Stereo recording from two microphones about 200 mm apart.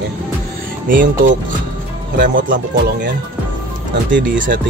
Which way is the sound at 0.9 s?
45° right (ahead or behind).